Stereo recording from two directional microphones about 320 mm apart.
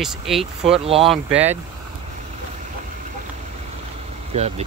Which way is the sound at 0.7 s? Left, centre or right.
Centre.